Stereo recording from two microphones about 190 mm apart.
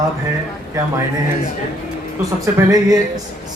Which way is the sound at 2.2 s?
15° right (ahead or behind).